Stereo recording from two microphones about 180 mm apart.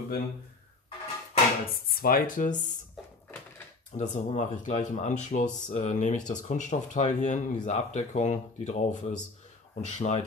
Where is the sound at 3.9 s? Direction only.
40° left (ahead or behind).